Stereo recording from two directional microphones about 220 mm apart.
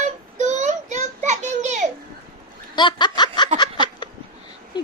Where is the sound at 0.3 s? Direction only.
35° right (ahead or behind).